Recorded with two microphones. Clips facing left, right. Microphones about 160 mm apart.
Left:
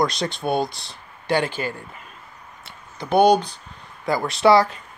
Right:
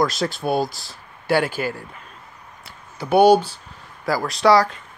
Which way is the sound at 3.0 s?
10° right (ahead or behind).